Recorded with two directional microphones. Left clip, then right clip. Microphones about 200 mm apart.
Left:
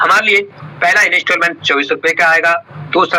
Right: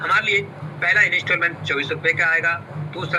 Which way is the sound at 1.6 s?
10° right (ahead or behind).